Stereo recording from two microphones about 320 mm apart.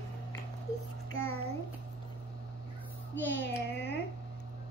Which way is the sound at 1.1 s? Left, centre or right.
Left.